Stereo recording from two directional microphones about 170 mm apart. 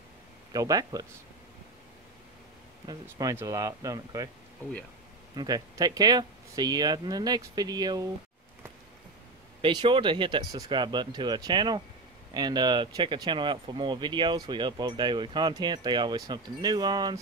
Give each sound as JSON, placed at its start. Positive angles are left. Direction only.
{"t": 0.5, "sound": "speech", "side_deg": -20}
{"t": 2.9, "sound": "speech", "side_deg": -20}
{"t": 5.3, "sound": "speech", "side_deg": -25}
{"t": 9.6, "sound": "speech", "side_deg": -30}